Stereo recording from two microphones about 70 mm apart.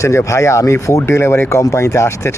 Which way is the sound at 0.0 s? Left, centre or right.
Left.